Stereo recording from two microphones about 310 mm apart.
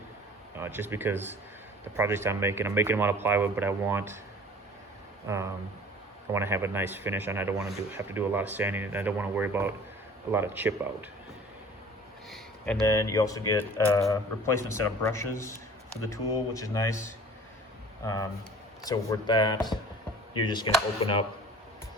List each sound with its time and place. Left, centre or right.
0.5 s speech: centre
5.3 s speech: centre
12.3 s speech: centre